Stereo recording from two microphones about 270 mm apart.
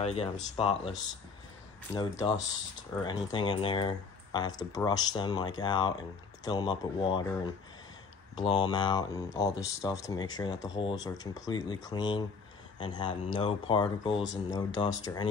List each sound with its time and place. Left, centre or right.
0.0 s speech: left
2.0 s speech: centre